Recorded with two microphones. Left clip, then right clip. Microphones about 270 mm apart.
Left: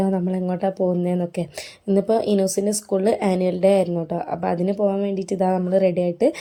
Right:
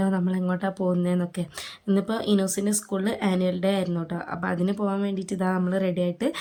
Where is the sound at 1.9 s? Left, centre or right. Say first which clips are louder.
Left 7 dB; centre.